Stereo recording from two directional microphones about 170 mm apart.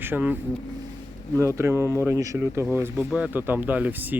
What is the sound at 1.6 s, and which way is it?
Speech, 15° right (ahead or behind).